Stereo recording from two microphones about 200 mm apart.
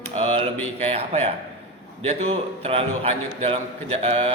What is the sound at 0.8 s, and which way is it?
A man's voice, 30° right (ahead or behind).